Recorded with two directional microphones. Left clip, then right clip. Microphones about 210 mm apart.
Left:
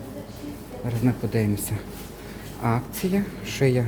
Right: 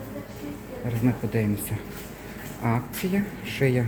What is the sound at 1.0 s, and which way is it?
Speech, 10° left (ahead or behind).